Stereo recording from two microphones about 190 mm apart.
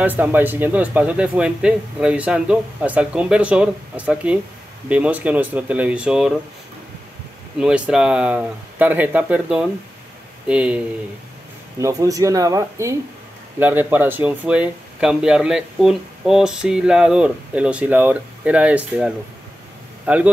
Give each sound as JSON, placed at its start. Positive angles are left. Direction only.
{"t": 0.0, "sound": "speech", "side_deg": -10}
{"t": 7.5, "sound": "speech", "side_deg": -5}
{"t": 11.8, "sound": "speech", "side_deg": -20}